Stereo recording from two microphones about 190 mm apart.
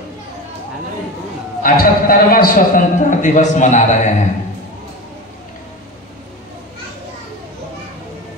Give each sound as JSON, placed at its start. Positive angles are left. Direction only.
{"t": 1.6, "sound": "a man's voice", "side_deg": 50}